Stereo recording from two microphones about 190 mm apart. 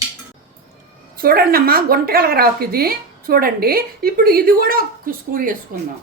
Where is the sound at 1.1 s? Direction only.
50° right (ahead or behind).